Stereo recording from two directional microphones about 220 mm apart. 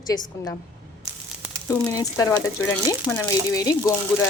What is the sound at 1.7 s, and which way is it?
Speech, 15° left (ahead or behind).